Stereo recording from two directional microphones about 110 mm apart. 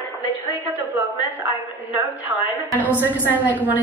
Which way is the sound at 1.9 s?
15° right (ahead or behind).